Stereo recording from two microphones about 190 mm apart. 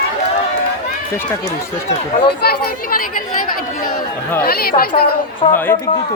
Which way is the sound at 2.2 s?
55° left (ahead or behind).